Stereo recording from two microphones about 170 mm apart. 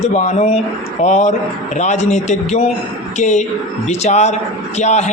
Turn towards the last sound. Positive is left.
turn(degrees=40)  # may be behind; listen again after turning